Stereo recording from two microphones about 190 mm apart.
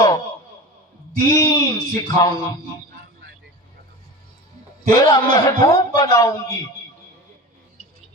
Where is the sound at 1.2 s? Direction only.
20° left (ahead or behind).